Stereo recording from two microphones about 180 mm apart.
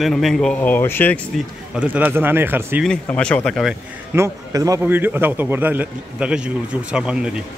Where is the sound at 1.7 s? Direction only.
10° right (ahead or behind).